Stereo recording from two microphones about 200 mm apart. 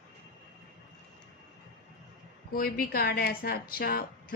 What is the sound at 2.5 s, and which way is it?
A woman's voice, 45° left (ahead or behind).